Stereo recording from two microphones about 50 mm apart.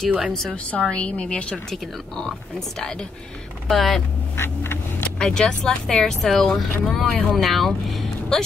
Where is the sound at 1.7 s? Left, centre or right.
Centre.